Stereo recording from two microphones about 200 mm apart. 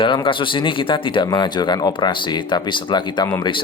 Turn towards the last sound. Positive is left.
turn(degrees=25)  # may be behind; listen again after turning